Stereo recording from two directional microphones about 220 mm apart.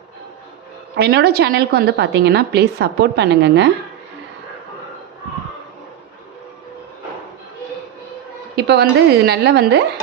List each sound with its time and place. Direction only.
0.9 s a woman's voice: 45° right (ahead or behind)
8.5 s a woman's voice: 50° right (ahead or behind)